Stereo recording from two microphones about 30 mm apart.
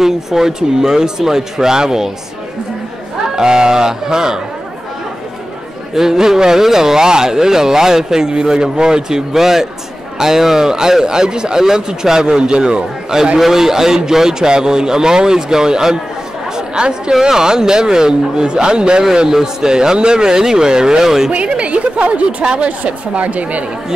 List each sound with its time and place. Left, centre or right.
0.0 s speech: centre
3.3 s speech: right
5.9 s speech: centre
9.3 s a man's voice: centre; by 12.8 s right
13.4 s a man's voice: centre; by 19.0 s right
19.2 s speech: centre
21.3 s a woman's voice: right
22.8 s a woman's voice: right